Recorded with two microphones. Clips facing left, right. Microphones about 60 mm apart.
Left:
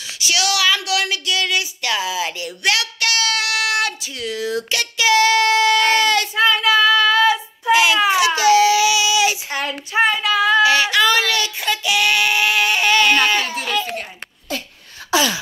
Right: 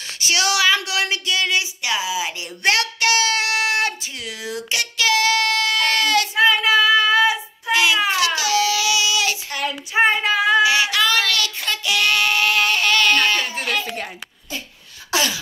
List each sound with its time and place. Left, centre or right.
0.2 s a sound: right
1.8 s speech: centre
2.4 s speech: right
3.0 s child singing: right
4.2 s a sound: centre
4.9 s child singing: centre
6.8 s child singing: centre
7.6 s a sound: centre
8.1 s baby cry: centre
8.8 s a sound: centre
9.9 s child singing: right
10.4 s child singing: centre
11.2 s child singing: left
11.6 s child singing: centre